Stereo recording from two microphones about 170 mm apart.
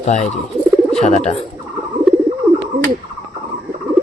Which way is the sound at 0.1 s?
45° left (ahead or behind).